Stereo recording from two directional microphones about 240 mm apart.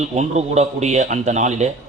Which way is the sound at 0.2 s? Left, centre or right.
Right.